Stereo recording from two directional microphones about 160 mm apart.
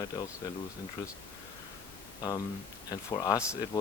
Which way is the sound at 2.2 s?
20° left (ahead or behind).